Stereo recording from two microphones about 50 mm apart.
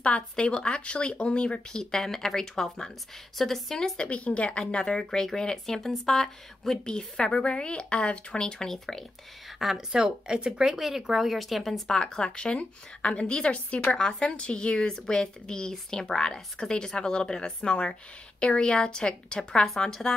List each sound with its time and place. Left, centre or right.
0.0 s a woman's voice: centre
4.1 s speech: left; by 9.0 s centre
9.6 s speech: centre
11.9 s a woman's voice: centre